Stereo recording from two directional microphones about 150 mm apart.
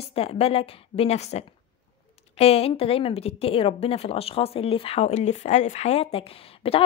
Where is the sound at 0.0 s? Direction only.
40° left (ahead or behind).